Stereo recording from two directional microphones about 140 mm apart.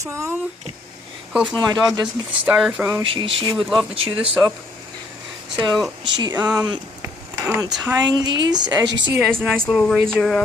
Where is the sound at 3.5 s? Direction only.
Centre (ahead or behind).